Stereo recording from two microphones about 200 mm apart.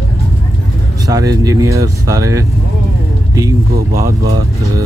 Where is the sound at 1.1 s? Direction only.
15° right (ahead or behind).